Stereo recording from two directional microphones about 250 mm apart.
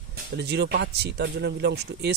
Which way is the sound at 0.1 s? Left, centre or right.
Right.